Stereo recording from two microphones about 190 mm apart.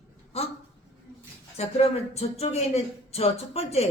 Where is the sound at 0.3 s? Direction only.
30° left (ahead or behind).